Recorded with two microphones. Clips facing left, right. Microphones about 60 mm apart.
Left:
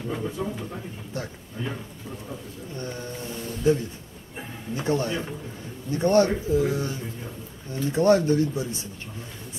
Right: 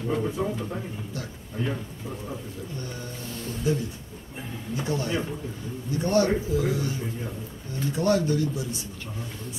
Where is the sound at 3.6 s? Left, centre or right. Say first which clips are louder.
Left 5 dB; left.